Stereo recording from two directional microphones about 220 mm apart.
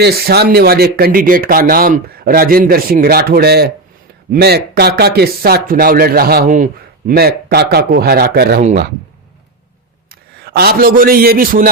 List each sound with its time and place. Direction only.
0.0 s speech: 45° right (ahead or behind)
10.1 s a man's voice: 45° right (ahead or behind)